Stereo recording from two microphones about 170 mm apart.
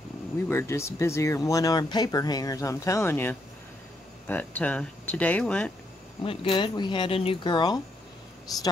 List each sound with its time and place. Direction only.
0.5 s speech: 15° left (ahead or behind)
6.2 s speech: 30° left (ahead or behind)